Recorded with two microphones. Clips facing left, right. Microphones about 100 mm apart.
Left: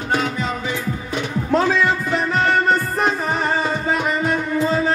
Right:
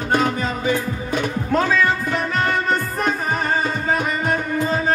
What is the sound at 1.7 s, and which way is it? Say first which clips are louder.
Music: left 1 dB; 45° right (ahead or behind).